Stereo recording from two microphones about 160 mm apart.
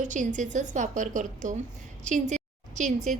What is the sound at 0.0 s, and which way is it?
A woman's voice, 50° right (ahead or behind).